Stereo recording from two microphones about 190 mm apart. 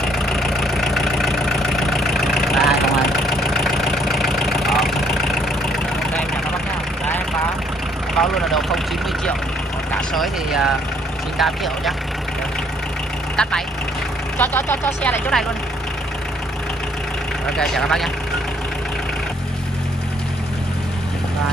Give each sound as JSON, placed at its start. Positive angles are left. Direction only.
{"t": 0.3, "sound": "vehicle", "side_deg": 0}
{"t": 8.2, "sound": "vehicle", "side_deg": 0}
{"t": 9.9, "sound": "speech", "side_deg": 0}
{"t": 13.4, "sound": "speech", "side_deg": 5}
{"t": 17.6, "sound": "speech", "side_deg": 0}